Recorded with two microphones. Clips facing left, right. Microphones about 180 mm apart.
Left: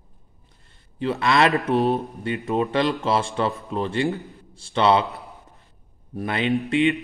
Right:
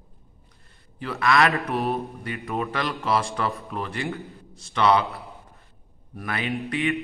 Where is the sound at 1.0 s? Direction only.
25° left (ahead or behind).